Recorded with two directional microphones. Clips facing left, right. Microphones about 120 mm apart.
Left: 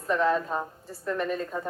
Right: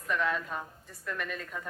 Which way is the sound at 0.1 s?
35° left (ahead or behind).